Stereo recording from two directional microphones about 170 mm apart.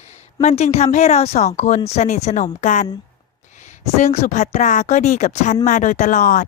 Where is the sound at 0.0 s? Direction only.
40° left (ahead or behind).